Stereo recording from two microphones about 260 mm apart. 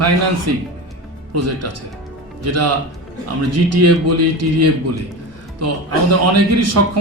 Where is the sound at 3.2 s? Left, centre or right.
Right.